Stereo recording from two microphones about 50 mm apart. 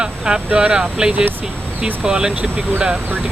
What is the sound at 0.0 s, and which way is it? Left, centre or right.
Speech, centre.